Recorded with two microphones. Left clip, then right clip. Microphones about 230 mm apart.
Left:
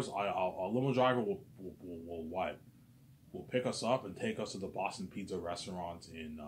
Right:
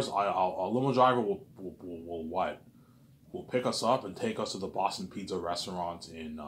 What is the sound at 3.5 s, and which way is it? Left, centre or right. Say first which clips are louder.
Speech: right 5 dB; right.